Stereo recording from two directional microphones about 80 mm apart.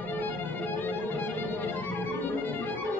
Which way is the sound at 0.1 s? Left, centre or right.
Left.